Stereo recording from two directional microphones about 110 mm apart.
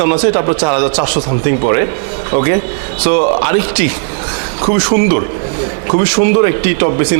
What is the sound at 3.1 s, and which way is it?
Speech, 20° right (ahead or behind).